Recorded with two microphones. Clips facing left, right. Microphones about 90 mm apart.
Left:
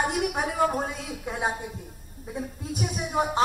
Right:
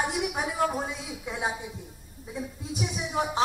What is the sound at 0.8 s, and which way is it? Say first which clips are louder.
A woman's voice: left 2 dB; 50° left (ahead or behind).